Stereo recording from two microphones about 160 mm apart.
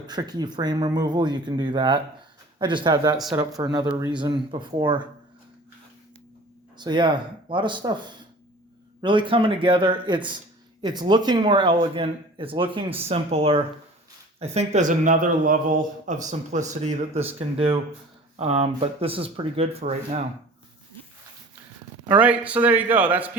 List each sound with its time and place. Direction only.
0.1 s speech: 25° right (ahead or behind)
6.7 s a man's voice: 30° right (ahead or behind); by 17.2 s 45° right (ahead or behind)
17.3 s speech: 30° right (ahead or behind)
18.3 s speech: 40° right (ahead or behind)
22.1 s a man's voice: 10° right (ahead or behind)